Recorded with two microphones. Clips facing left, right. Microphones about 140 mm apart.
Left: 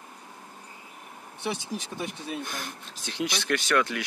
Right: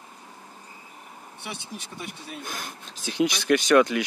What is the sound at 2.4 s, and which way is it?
Speech, 5° right (ahead or behind).